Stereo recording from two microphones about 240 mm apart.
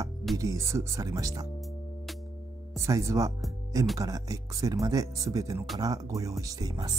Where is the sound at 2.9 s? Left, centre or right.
Centre.